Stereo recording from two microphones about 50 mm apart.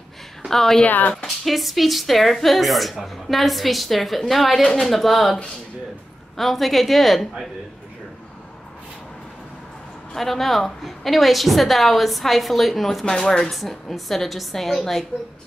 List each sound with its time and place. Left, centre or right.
0.5 s a woman's voice: centre
0.8 s speech: left
1.1 s a woman's voice: centre
10.1 s a woman's voice: centre
13.0 s a woman's voice: centre